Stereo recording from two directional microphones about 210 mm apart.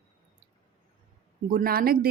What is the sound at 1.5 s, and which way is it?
Speech, 40° right (ahead or behind).